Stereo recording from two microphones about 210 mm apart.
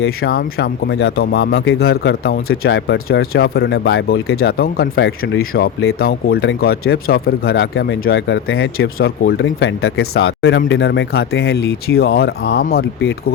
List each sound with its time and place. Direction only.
0.0 s speech: 50° left (ahead or behind)